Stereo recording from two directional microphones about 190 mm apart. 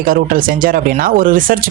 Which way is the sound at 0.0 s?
45° right (ahead or behind).